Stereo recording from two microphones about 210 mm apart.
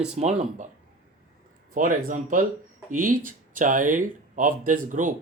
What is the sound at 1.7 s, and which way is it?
Speech, 40° right (ahead or behind).